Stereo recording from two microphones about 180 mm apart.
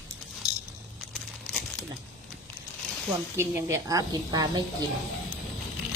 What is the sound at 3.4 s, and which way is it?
A woman's voice, 15° right (ahead or behind).